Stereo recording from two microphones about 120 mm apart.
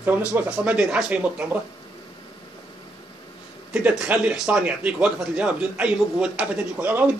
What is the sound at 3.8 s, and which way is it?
Speech, 10° right (ahead or behind).